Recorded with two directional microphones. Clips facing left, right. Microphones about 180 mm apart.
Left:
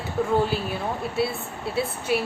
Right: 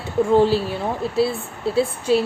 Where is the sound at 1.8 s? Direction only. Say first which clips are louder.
Right 6 dB; 30° right (ahead or behind).